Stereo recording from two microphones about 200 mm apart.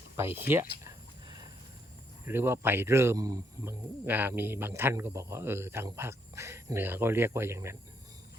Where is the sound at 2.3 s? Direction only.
10° right (ahead or behind).